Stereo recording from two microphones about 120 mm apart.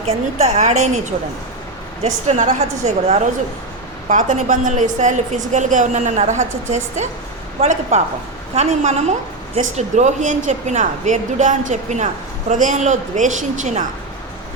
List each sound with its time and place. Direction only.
0.0 s a woman's voice: 65° right (ahead or behind)
2.0 s a woman's voice: 80° right
4.1 s a woman's voice: 90° right
12.5 s a woman's voice: 90° right